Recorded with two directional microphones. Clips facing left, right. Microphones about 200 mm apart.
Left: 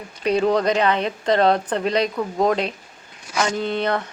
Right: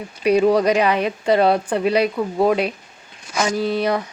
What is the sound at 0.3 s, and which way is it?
Speech, 10° right (ahead or behind).